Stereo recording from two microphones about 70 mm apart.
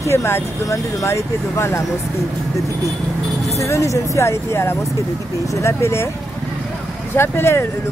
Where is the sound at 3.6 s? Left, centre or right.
Left.